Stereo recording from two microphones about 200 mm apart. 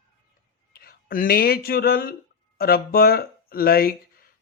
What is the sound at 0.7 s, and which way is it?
Speech, 50° left (ahead or behind).